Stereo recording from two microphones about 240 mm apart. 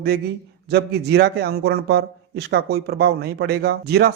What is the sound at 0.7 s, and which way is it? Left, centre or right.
A man's voice, right.